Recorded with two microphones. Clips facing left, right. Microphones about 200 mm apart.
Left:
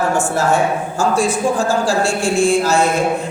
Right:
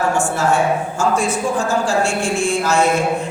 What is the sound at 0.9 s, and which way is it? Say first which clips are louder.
A woman's voice: left 2 dB; 35° left (ahead or behind).